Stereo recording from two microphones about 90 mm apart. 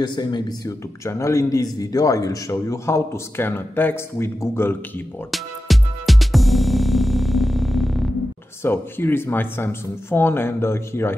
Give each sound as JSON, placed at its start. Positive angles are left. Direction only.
{"t": 0.0, "sound": "speech", "side_deg": 60}
{"t": 0.7, "sound": "a man's voice", "side_deg": 35}
{"t": 5.3, "sound": "music", "side_deg": 0}
{"t": 8.6, "sound": "speech", "side_deg": 25}